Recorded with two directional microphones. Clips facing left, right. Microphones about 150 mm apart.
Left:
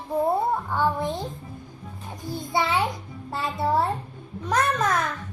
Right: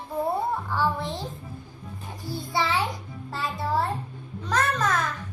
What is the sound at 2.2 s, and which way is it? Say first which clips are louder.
A child's voice: left 2 dB; 20° left (ahead or behind).